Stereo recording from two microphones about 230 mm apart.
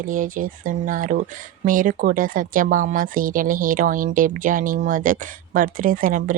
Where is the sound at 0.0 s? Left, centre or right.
Right.